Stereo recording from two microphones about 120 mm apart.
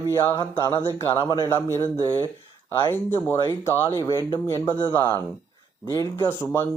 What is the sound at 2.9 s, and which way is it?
Speech, 20° left (ahead or behind).